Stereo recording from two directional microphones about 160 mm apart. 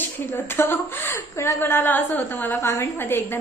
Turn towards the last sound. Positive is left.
turn(degrees=15)  # may be behind; listen again after turning